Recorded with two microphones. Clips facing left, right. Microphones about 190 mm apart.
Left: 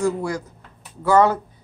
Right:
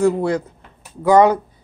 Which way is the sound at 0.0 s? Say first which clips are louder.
Right 6 dB; 60° right (ahead or behind).